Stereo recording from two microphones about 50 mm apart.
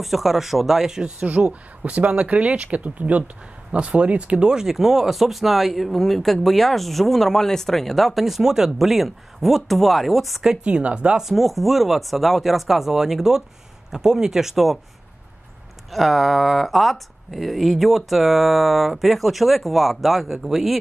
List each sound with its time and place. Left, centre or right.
0.0 s speech: centre
1.5 s speech: right; by 10.6 s centre
10.6 s speech: right
11.1 s speech: centre
15.9 s speech: centre